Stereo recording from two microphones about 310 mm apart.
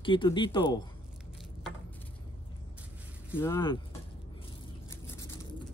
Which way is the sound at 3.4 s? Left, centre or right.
Centre.